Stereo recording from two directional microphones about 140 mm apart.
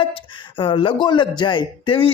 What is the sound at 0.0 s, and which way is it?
A man's voice, 40° left (ahead or behind).